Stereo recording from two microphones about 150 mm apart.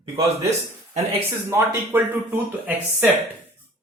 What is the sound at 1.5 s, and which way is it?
Speech, 15° right (ahead or behind).